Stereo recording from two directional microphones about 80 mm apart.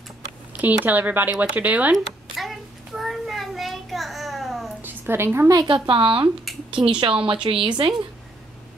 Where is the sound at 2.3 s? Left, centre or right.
Centre.